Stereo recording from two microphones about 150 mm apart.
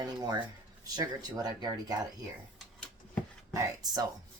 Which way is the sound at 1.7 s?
25° right (ahead or behind).